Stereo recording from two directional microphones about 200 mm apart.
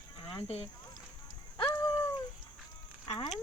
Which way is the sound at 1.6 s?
20° left (ahead or behind).